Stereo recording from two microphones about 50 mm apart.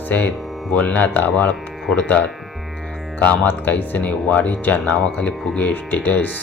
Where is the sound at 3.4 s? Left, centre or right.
Left.